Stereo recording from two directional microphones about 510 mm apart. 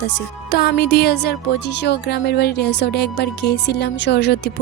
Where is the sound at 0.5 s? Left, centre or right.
Centre.